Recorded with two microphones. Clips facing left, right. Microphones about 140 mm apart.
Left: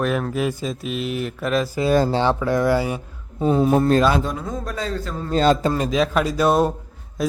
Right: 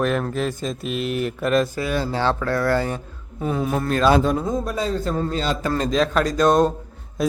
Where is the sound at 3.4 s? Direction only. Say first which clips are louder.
Left 6 dB; 30° left (ahead or behind).